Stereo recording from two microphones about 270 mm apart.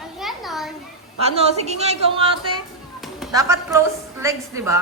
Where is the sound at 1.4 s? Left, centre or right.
Right.